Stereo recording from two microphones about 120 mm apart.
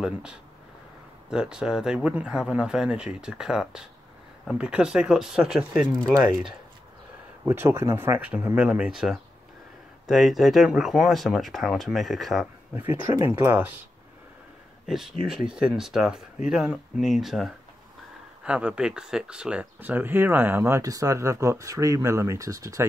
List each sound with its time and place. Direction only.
0.0 s speech: 5° right (ahead or behind)
5.9 s speech: 5° left (ahead or behind)
7.4 s speech: 20° right (ahead or behind); by 12.4 s centre (ahead or behind)
12.7 s speech: 15° right (ahead or behind)
14.9 s speech: 5° right (ahead or behind); by 22.8 s 25° right (ahead or behind)